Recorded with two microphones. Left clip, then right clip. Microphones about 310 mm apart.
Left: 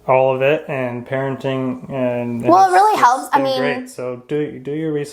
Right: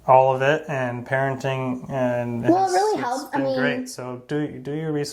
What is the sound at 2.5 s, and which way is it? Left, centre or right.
A woman's voice, left.